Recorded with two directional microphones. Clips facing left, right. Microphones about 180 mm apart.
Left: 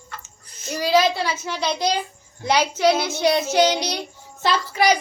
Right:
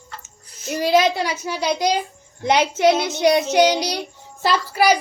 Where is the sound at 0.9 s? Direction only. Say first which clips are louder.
Right 1 dB; 20° right (ahead or behind).